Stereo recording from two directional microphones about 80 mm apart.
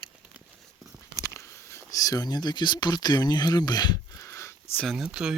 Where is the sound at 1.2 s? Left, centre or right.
Left.